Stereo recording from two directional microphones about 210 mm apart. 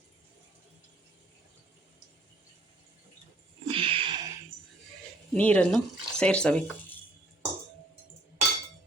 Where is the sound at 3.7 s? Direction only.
25° right (ahead or behind).